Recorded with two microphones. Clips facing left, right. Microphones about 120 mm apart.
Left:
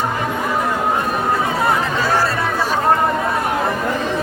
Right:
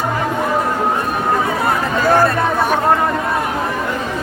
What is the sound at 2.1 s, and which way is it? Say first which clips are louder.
Chatter: right 4 dB; 55° right (ahead or behind).